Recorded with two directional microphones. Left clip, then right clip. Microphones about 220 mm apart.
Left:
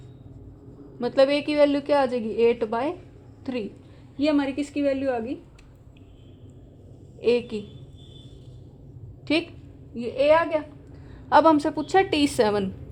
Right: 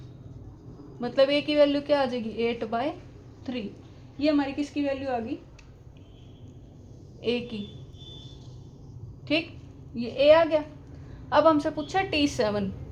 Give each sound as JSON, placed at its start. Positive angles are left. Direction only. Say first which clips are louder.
{"t": 0.9, "sound": "a woman's voice", "louder": "left 3 dB", "side_deg": 40}
{"t": 4.2, "sound": "a woman's voice", "louder": "left 2 dB", "side_deg": 45}
{"t": 7.2, "sound": "a woman's voice", "louder": "left 7 dB", "side_deg": 40}
{"t": 9.3, "sound": "a woman's voice", "louder": "left 2 dB", "side_deg": 40}
{"t": 9.9, "sound": "a woman's voice", "louder": "even", "side_deg": 30}
{"t": 11.3, "sound": "a woman's voice", "louder": "left 3 dB", "side_deg": 45}